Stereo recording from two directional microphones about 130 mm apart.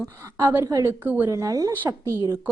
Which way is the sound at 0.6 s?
25° right (ahead or behind).